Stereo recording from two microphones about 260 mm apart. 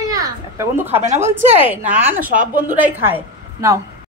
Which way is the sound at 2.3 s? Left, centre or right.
Right.